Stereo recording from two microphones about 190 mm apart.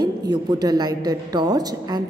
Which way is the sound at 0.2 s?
20° right (ahead or behind).